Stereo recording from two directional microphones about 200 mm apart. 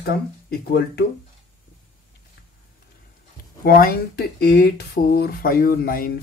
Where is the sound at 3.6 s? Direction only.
50° left (ahead or behind).